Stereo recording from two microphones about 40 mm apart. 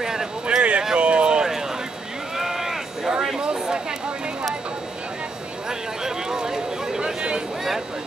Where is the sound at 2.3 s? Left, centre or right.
Centre.